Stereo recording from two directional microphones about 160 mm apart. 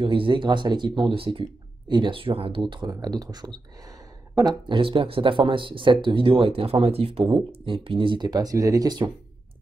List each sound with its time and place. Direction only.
0.0 s speech: 35° right (ahead or behind)